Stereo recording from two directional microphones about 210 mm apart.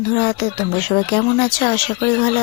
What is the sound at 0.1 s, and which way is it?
Speech, 25° left (ahead or behind).